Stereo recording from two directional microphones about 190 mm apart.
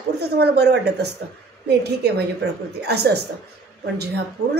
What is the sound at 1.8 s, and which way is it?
A woman's voice, 60° right (ahead or behind).